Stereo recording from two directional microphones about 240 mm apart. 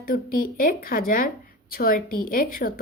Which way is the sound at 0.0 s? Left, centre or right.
Left.